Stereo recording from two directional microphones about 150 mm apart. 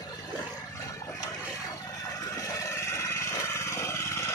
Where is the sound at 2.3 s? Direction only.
20° left (ahead or behind).